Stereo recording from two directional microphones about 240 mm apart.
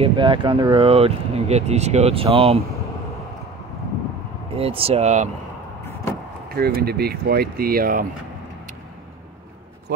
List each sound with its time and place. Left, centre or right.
0.0 s speech: right
4.6 s speech: right
6.5 s speech: right
9.9 s speech: right